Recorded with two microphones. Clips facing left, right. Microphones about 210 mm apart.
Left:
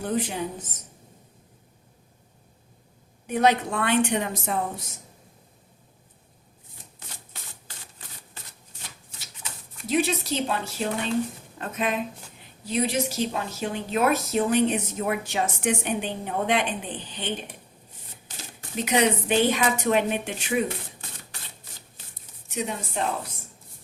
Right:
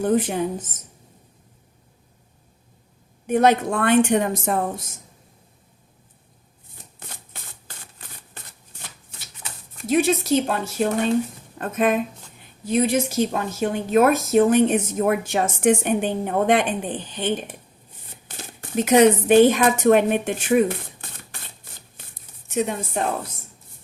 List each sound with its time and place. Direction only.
0.0 s a woman's voice: 50° right (ahead or behind)
3.2 s a woman's voice: 50° right (ahead or behind)
9.7 s a woman's voice: 50° right (ahead or behind)
18.3 s a sound: 60° right (ahead or behind)
18.9 s a woman's voice: 50° right (ahead or behind)
22.4 s a sound: 50° right (ahead or behind)
23.0 s a woman's voice: 50° right (ahead or behind)